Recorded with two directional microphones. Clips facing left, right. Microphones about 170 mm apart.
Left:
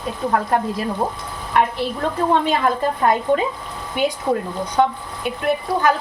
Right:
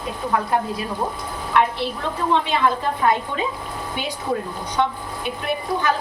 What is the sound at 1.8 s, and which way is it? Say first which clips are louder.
A woman's voice: left 4 dB; 40° left (ahead or behind).